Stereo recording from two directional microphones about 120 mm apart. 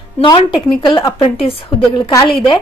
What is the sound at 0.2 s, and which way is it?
Speech, 40° left (ahead or behind).